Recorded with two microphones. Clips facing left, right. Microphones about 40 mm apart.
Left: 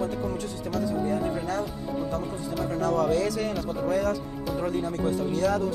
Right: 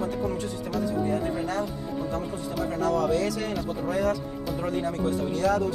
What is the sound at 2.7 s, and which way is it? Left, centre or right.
Speech, right.